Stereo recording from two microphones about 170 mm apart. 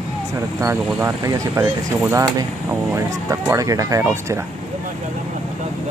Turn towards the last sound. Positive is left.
turn(degrees=-15)  # may be behind; listen again after turning